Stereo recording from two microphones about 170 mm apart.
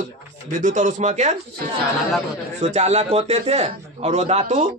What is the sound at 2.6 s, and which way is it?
A man's voice, 40° right (ahead or behind).